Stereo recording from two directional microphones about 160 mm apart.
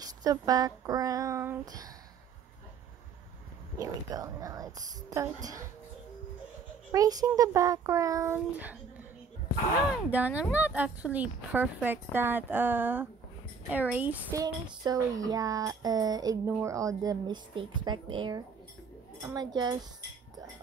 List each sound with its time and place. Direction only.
0.0 s speech: 25° right (ahead or behind)
3.8 s speech: 20° right (ahead or behind)
6.9 s speech: 25° right (ahead or behind)
10.0 s speech: 10° right (ahead or behind)
14.4 s speech: 25° right (ahead or behind)